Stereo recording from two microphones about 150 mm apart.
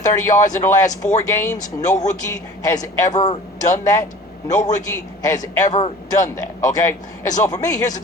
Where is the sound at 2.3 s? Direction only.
25° left (ahead or behind).